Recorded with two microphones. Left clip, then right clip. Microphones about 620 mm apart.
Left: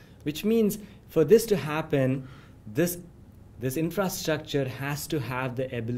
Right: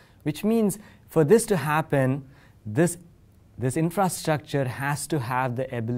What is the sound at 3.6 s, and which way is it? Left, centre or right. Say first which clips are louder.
Speech: right 4 dB; right.